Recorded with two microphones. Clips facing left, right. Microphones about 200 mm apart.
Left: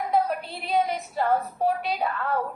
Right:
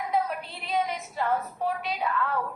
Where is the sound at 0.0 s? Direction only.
35° left (ahead or behind).